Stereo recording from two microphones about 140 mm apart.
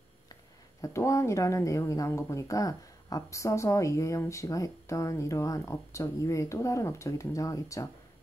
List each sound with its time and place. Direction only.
0.3 s speech: 25° left (ahead or behind)